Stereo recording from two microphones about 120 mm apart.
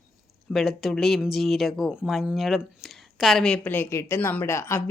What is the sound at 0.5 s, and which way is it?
Speech, centre (ahead or behind).